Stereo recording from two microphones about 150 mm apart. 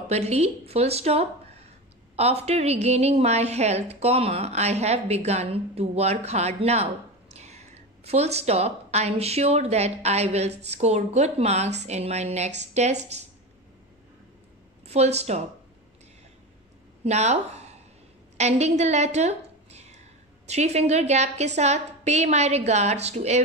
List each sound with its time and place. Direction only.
0.1 s a woman's voice: 45° right (ahead or behind)
14.9 s a woman's voice: 45° right (ahead or behind)
17.0 s a woman's voice: 50° right (ahead or behind)